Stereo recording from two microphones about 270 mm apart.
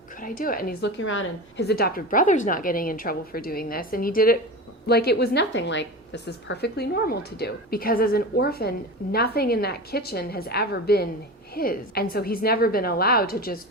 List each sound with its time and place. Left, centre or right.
0.2 s a woman's voice: left